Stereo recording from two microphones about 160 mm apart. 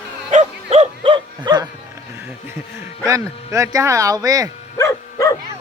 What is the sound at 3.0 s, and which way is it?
Speech, 20° right (ahead or behind).